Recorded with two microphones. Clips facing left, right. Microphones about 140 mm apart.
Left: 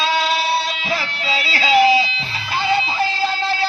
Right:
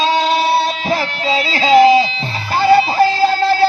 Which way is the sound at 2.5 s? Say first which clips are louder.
Right 9 dB; 35° right (ahead or behind).